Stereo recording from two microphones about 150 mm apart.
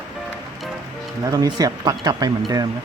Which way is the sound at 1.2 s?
25° right (ahead or behind).